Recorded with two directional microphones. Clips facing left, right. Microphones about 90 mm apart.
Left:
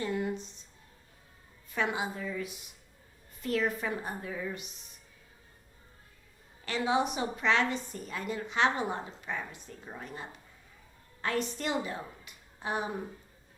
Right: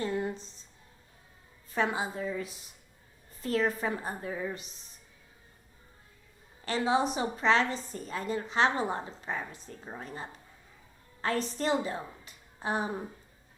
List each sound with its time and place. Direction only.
0.2 s a sound: 35° right (ahead or behind)
1.7 s a woman's voice: 35° right (ahead or behind)
6.7 s a woman's voice: 35° right (ahead or behind)